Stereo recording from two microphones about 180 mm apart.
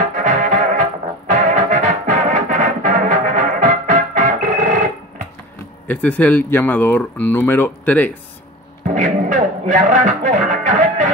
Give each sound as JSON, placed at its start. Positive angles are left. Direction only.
{"t": 0.1, "sound": "brass instrument", "side_deg": -45}
{"t": 1.3, "sound": "music", "side_deg": -45}
{"t": 5.9, "sound": "speech", "side_deg": 10}
{"t": 8.8, "sound": "music", "side_deg": -45}